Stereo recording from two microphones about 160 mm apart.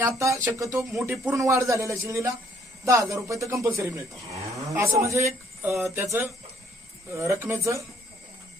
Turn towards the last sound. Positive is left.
turn(degrees=-15)  # may be behind; listen again after turning